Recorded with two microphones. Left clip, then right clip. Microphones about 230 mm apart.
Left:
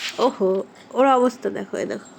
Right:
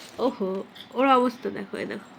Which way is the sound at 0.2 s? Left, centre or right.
Left.